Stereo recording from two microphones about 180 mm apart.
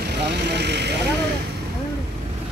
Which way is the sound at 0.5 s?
70° right (ahead or behind).